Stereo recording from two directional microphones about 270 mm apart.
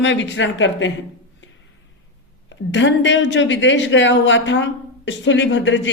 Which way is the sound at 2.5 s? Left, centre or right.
Left.